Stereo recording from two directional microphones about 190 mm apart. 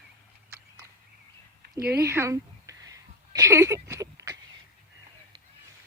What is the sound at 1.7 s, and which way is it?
Speech, 55° right (ahead or behind).